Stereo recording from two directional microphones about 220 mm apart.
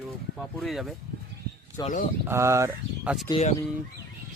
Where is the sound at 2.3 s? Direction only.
10° right (ahead or behind).